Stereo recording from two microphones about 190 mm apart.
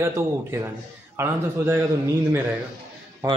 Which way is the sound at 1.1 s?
15° right (ahead or behind).